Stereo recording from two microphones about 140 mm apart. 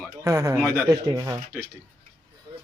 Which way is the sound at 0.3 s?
20° right (ahead or behind).